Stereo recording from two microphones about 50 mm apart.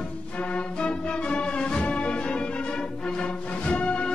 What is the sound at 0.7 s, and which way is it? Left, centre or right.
Music, left.